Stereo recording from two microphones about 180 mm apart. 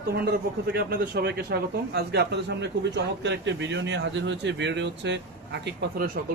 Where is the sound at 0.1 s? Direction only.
65° right (ahead or behind).